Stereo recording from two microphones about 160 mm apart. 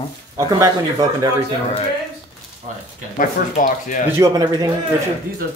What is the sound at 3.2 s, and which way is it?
Speech, 55° left (ahead or behind).